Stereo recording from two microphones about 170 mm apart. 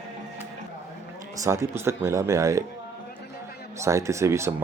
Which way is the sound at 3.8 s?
15° right (ahead or behind).